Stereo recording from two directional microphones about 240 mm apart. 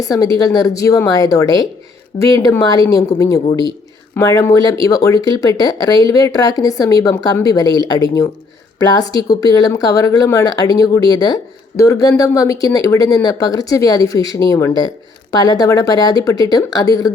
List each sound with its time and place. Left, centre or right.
0.0 s speech: centre
9.3 s speech: centre